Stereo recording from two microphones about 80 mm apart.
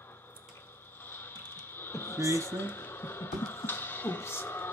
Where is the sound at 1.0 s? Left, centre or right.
Left.